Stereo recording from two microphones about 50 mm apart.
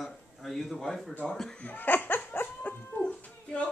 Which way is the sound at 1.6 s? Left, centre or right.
Left.